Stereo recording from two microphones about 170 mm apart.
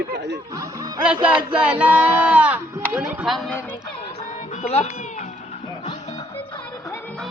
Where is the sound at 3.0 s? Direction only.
5° right (ahead or behind).